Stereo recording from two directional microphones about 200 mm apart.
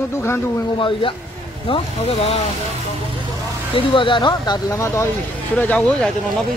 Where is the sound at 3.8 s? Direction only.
25° left (ahead or behind).